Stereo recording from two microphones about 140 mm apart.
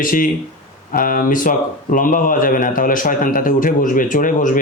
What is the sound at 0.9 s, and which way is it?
A man's voice, 90° left.